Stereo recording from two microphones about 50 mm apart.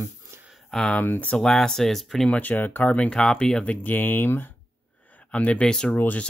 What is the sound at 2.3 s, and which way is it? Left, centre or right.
Speech, left.